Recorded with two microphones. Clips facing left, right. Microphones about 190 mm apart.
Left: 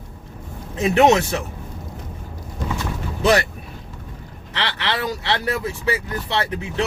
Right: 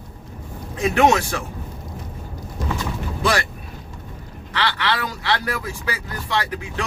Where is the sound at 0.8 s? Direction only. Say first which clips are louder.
Left 2 dB; 20° left (ahead or behind).